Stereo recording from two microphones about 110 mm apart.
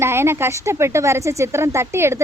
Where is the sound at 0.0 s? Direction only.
20° right (ahead or behind).